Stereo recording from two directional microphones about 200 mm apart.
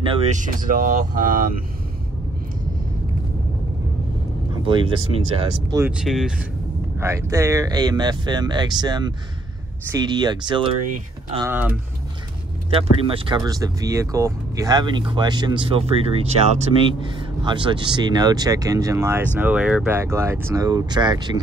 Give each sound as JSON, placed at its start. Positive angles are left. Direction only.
{"t": 0.0, "sound": "speech", "side_deg": -30}
{"t": 4.6, "sound": "speech", "side_deg": -25}
{"t": 5.9, "sound": "speech", "side_deg": -5}
{"t": 7.0, "sound": "speech", "side_deg": -15}
{"t": 11.4, "sound": "speech", "side_deg": -10}
{"t": 12.7, "sound": "speech", "side_deg": -25}